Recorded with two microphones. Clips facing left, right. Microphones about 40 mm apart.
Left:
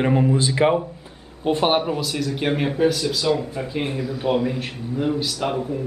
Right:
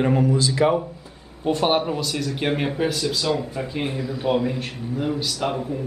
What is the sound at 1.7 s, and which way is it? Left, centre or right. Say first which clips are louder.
Speech: left 1 dB; centre.